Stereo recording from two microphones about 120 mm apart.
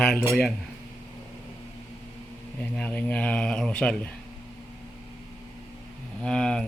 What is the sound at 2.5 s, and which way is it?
Speech, 10° left (ahead or behind).